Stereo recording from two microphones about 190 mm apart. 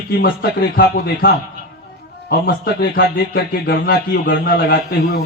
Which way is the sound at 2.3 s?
50° left (ahead or behind).